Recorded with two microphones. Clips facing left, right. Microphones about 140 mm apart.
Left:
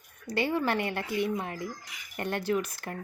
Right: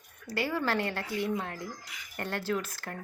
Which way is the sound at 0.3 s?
20° left (ahead or behind).